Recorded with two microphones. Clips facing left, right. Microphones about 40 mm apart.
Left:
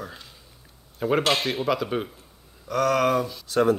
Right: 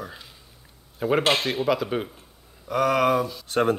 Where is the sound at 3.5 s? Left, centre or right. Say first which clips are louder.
Left 2 dB; right.